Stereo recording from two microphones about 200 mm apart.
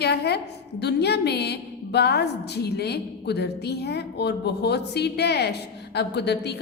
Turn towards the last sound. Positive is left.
turn(degrees=55)  # may be behind; listen again after turning